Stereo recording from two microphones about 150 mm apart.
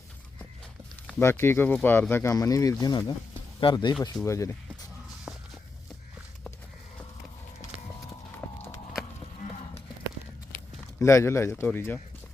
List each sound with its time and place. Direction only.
1.2 s speech: 15° left (ahead or behind)
5.3 s walk: centre (ahead or behind)
8.4 s a sound: 10° left (ahead or behind)
11.0 s speech: 20° left (ahead or behind)